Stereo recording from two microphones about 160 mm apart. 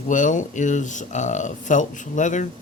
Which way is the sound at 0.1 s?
50° left (ahead or behind).